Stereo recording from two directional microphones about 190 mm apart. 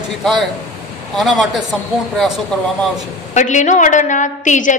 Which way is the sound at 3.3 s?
40° left (ahead or behind).